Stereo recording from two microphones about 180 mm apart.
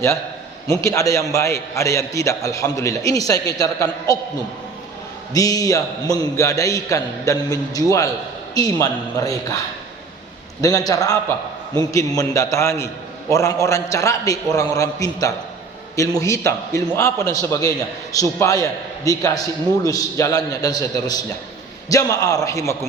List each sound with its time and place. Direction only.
0.7 s a man's voice: 15° left (ahead or behind)
5.3 s a man's voice: 20° left (ahead or behind)
10.6 s a man's voice: 20° left (ahead or behind)